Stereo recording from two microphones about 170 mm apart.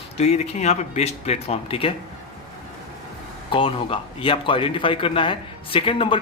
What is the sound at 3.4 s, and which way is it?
Speech, 30° left (ahead or behind).